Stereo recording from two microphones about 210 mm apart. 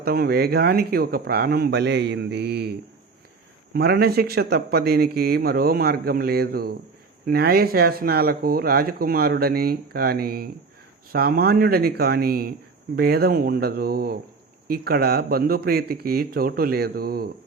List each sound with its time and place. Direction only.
0.0 s speech: 45° right (ahead or behind)
3.8 s speech: 50° right (ahead or behind)